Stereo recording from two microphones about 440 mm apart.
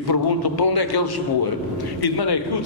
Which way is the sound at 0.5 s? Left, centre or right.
Left.